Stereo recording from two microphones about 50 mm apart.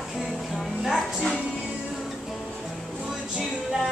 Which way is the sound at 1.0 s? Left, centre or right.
Centre.